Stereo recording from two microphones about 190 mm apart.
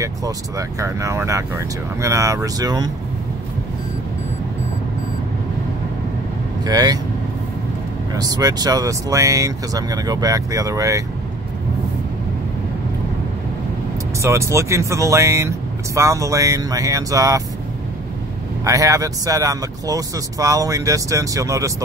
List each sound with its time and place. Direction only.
0.0 s speech: 15° right (ahead or behind)
6.6 s speech: 20° right (ahead or behind)
8.1 s speech: 20° right (ahead or behind)
14.2 s speech: 15° right (ahead or behind)
18.6 s speech: 15° right (ahead or behind)